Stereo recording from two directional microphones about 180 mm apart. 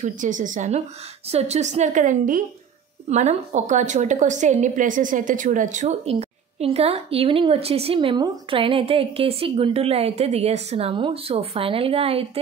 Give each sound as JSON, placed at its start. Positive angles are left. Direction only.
{"t": 0.0, "sound": "a woman's voice", "side_deg": -45}